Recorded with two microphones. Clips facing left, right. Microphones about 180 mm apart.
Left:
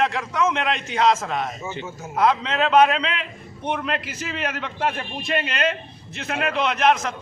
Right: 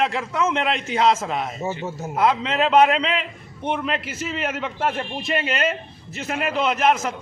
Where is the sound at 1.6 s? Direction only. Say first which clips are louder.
Right 5 dB; 40° right (ahead or behind).